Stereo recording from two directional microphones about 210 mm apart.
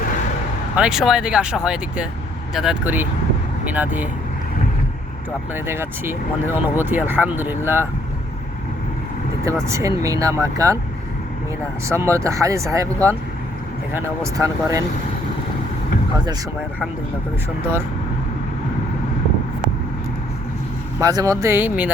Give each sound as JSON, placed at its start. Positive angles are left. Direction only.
{"t": 0.8, "sound": "speech", "side_deg": -5}
{"t": 5.6, "sound": "speech", "side_deg": -10}
{"t": 9.6, "sound": "speech", "side_deg": -15}
{"t": 11.9, "sound": "speech", "side_deg": -15}
{"t": 14.3, "sound": "speech", "side_deg": -15}
{"t": 21.0, "sound": "speech", "side_deg": -15}